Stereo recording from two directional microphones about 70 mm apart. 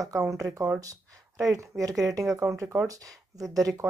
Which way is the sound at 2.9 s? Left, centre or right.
Right.